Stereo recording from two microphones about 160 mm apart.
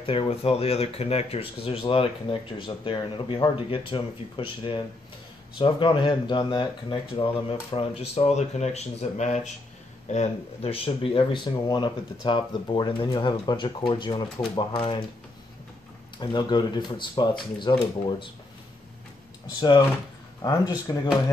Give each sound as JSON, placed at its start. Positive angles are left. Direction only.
{"t": 0.0, "sound": "speech", "side_deg": 35}
{"t": 16.2, "sound": "speech", "side_deg": 25}
{"t": 19.6, "sound": "speech", "side_deg": 30}
{"t": 20.9, "sound": "speech", "side_deg": 25}